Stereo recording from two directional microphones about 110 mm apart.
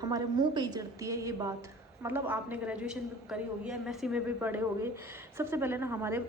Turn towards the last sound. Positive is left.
turn(degrees=-20)  # may be behind; listen again after turning